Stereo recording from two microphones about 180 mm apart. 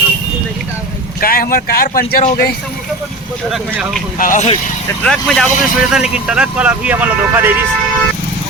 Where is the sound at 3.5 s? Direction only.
Centre (ahead or behind).